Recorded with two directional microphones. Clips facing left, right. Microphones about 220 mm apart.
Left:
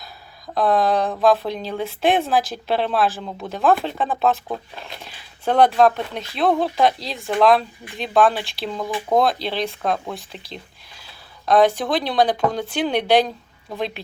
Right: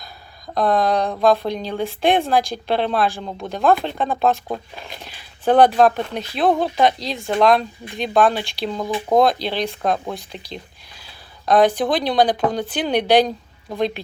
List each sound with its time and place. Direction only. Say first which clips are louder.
0.0 s speech: right 1 dB; 5° left (ahead or behind)
5.0 s a sound: right 5 dB; centre (ahead or behind)
5.8 s speech: right 1 dB; centre (ahead or behind)